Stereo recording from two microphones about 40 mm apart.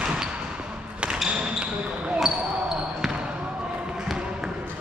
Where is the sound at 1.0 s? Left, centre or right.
Right.